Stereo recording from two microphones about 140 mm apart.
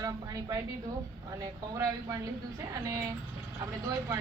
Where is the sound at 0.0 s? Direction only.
25° right (ahead or behind).